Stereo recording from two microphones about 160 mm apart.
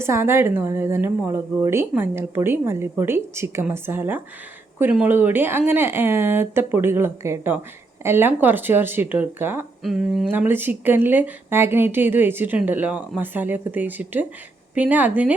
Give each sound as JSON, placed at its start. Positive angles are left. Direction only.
{"t": 0.0, "sound": "a woman's voice", "side_deg": -15}
{"t": 9.8, "sound": "speech", "side_deg": -5}
{"t": 10.3, "sound": "a woman's voice", "side_deg": -15}